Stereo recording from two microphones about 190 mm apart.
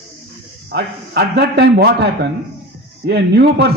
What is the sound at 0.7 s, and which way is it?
A man's voice, 55° right (ahead or behind).